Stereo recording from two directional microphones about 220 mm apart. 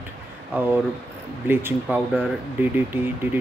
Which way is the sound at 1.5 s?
10° right (ahead or behind).